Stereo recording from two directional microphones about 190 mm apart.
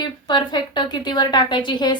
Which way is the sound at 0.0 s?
20° left (ahead or behind).